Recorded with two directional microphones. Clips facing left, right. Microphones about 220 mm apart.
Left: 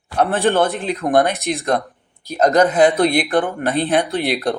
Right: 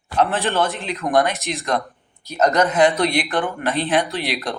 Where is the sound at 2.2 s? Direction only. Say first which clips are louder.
Left 3 dB; 35° left (ahead or behind).